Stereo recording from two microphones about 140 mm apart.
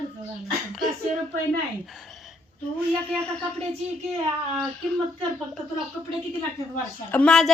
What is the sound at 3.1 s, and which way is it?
Speech, 10° left (ahead or behind).